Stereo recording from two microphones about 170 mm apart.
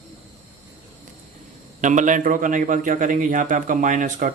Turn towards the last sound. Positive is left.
turn(degrees=-50)  # may be behind; listen again after turning